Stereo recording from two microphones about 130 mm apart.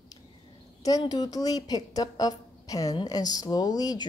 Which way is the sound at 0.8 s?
30° left (ahead or behind).